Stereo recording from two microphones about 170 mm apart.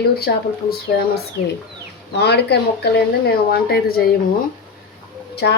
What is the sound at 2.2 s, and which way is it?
Speech, 75° left (ahead or behind).